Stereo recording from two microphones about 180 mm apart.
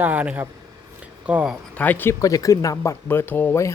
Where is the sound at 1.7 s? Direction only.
10° left (ahead or behind).